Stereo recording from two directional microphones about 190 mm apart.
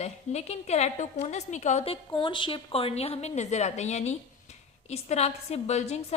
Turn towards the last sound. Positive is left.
turn(degrees=35)  # may be behind; listen again after turning